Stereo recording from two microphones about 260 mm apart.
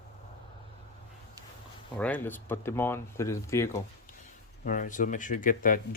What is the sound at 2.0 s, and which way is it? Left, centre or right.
Speech, centre.